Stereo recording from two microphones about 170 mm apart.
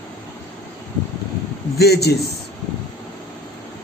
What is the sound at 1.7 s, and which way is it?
Speech, 70° left (ahead or behind).